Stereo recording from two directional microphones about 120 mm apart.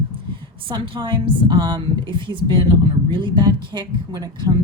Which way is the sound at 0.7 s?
45° right (ahead or behind).